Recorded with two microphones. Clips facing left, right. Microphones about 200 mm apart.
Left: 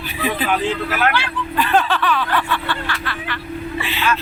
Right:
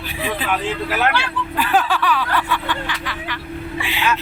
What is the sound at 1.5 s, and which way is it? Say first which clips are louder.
A man's voice: left 1 dB; 5° right (ahead or behind).